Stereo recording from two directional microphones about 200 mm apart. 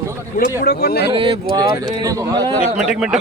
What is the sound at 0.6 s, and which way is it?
Speech, 55° left (ahead or behind).